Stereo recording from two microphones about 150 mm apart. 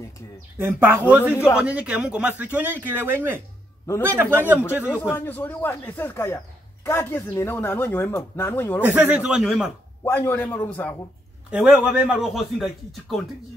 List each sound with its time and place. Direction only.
0.6 s speech: 15° right (ahead or behind)
1.3 s speech: 15° left (ahead or behind)
1.6 s speech: 10° right (ahead or behind)
5.1 s speech: 15° left (ahead or behind)
8.8 s speech: 10° right (ahead or behind)
10.0 s speech: 15° left (ahead or behind)
11.5 s speech: 10° right (ahead or behind)